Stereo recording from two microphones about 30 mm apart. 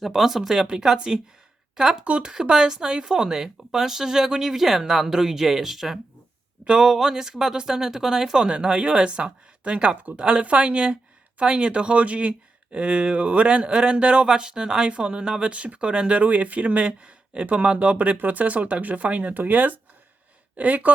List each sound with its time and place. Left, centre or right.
0.2 s speech: centre
0.7 s speech: right
6.7 s speech: right
8.4 s speech: right
12.7 s speech: right
14.3 s speech: right
14.8 s speech: right
16.2 s speech: right
16.8 s speech: right
18.2 s speech: right
19.3 s speech: right
20.6 s speech: right